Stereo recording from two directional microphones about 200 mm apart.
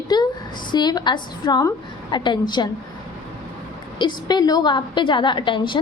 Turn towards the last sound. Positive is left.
turn(degrees=25)  # may be behind; listen again after turning